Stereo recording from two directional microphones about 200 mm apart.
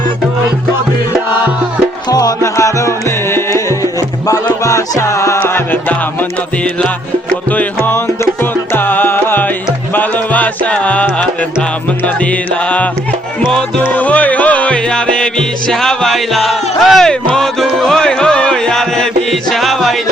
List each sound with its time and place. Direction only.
2.0 s music: 20° left (ahead or behind); by 20.0 s centre (ahead or behind)